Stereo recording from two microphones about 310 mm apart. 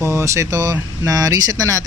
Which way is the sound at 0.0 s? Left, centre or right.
Centre.